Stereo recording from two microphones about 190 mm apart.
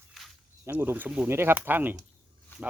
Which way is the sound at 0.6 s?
10° right (ahead or behind).